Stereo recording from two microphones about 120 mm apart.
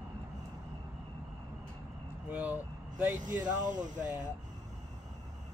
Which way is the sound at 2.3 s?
15° right (ahead or behind).